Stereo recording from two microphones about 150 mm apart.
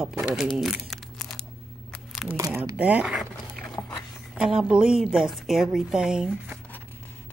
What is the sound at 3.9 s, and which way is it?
Speech, 5° right (ahead or behind).